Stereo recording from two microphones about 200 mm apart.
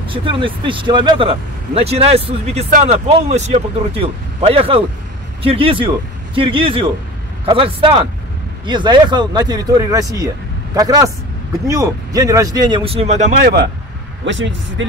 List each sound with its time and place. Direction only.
0.0 s speech: 25° right (ahead or behind)
14.2 s speech: 65° right (ahead or behind)